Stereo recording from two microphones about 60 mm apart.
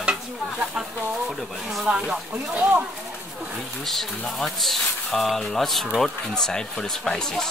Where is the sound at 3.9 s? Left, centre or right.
Centre.